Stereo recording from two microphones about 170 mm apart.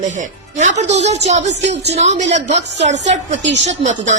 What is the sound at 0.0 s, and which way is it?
Speech, 45° right (ahead or behind).